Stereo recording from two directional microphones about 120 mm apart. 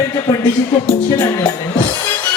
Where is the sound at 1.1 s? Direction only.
35° left (ahead or behind).